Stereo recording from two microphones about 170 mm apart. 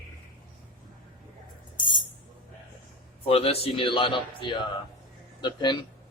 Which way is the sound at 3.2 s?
35° left (ahead or behind).